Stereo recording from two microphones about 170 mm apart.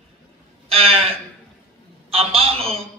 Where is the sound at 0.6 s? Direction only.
35° right (ahead or behind).